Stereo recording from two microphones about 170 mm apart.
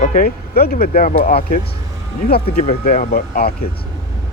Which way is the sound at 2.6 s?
55° left (ahead or behind).